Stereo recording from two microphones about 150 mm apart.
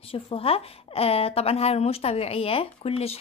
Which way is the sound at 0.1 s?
40° left (ahead or behind).